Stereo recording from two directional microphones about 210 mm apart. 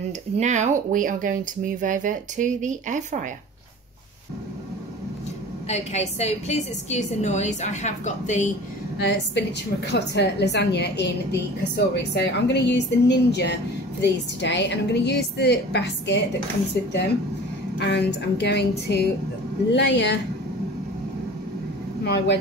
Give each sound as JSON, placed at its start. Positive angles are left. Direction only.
{"t": 0.4, "sound": "speech", "side_deg": -35}
{"t": 5.7, "sound": "a woman's voice", "side_deg": 30}
{"t": 8.9, "sound": "a woman's voice", "side_deg": 55}
{"t": 17.7, "sound": "a woman's voice", "side_deg": 55}
{"t": 22.0, "sound": "speech", "side_deg": 50}